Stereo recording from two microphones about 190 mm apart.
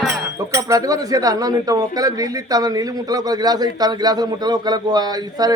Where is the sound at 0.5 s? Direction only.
15° right (ahead or behind).